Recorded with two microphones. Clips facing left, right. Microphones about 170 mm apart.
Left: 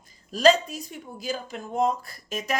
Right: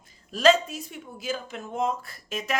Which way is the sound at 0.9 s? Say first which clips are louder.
Left 1 dB; 40° left (ahead or behind).